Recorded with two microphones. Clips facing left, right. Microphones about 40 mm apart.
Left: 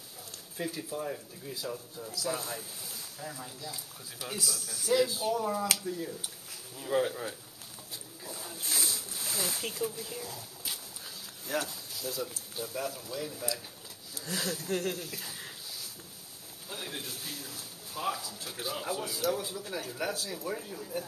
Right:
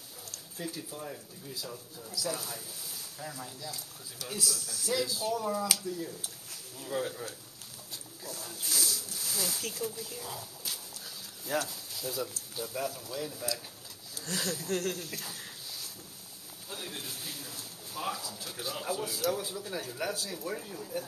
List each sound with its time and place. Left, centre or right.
0.3 s speech: centre
2.2 s speech: left
3.2 s speech: centre
4.2 s speech: left
5.0 s speech: left
5.3 s speech: centre
5.9 s speech: centre
11.9 s speech: centre
15.1 s a sound: centre
16.6 s a man's voice: centre
17.0 s speech: centre